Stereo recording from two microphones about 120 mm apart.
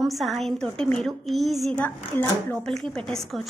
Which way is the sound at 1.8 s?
15° left (ahead or behind).